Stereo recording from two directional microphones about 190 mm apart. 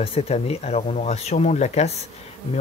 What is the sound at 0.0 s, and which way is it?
Speech, 30° left (ahead or behind).